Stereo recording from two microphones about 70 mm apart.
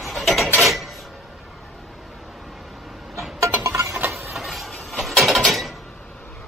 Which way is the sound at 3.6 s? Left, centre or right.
Right.